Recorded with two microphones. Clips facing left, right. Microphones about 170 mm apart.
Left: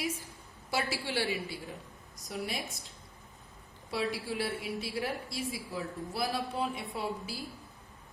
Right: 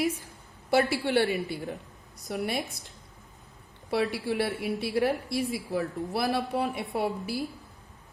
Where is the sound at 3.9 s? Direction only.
60° right (ahead or behind).